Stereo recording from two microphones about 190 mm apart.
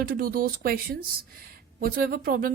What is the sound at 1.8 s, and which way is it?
Speech, 50° right (ahead or behind).